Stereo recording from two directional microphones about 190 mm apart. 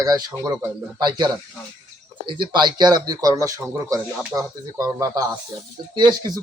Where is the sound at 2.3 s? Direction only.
25° right (ahead or behind).